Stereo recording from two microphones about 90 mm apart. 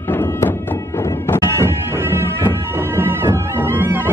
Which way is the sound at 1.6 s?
30° right (ahead or behind).